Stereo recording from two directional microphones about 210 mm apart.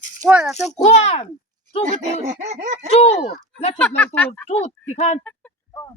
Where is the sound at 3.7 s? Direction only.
5° left (ahead or behind).